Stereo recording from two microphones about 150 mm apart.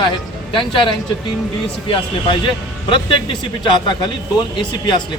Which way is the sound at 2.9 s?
35° left (ahead or behind).